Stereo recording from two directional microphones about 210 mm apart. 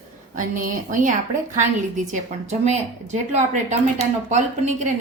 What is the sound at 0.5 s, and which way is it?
A woman's voice, 40° right (ahead or behind).